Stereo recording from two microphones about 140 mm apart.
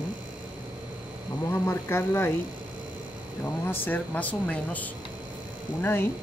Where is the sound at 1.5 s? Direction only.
20° left (ahead or behind).